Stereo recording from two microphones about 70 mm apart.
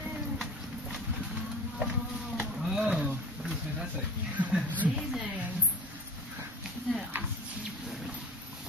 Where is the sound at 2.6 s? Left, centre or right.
Centre.